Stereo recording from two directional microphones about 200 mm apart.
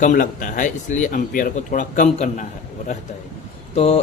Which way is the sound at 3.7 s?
30° left (ahead or behind).